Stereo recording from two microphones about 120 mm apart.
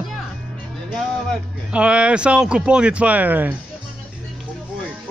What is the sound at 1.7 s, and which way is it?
A man's voice, 10° right (ahead or behind).